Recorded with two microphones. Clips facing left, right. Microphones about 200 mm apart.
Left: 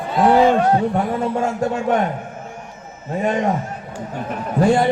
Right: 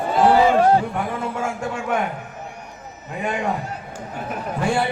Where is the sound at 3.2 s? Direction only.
40° left (ahead or behind).